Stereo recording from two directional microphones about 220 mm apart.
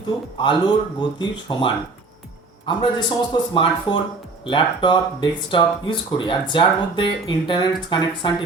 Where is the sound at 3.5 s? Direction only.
20° left (ahead or behind).